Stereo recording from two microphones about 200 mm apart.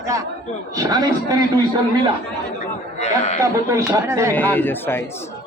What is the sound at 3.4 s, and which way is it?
Speech, 15° right (ahead or behind).